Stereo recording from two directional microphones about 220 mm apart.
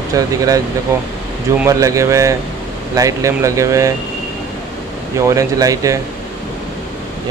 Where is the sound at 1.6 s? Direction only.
15° right (ahead or behind).